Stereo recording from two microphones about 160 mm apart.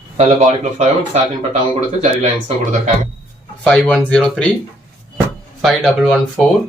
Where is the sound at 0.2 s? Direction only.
45° right (ahead or behind).